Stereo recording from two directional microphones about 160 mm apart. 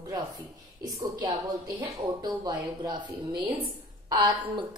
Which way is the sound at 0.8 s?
20° right (ahead or behind).